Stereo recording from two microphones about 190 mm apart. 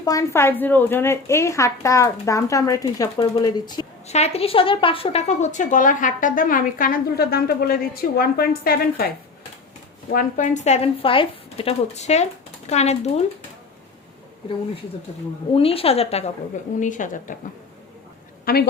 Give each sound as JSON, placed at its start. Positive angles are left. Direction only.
{"t": 0.0, "sound": "a woman's voice", "side_deg": 15}
{"t": 4.0, "sound": "a woman's voice", "side_deg": 35}
{"t": 15.5, "sound": "a woman's voice", "side_deg": 30}
{"t": 18.4, "sound": "a woman's voice", "side_deg": 55}